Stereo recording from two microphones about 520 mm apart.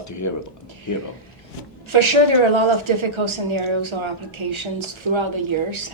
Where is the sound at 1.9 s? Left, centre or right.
Right.